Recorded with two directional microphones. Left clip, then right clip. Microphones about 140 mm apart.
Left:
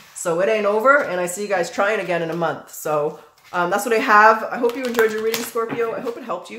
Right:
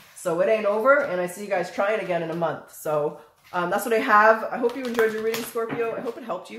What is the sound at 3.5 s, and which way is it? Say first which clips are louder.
Speech: left 4 dB; 20° left (ahead or behind).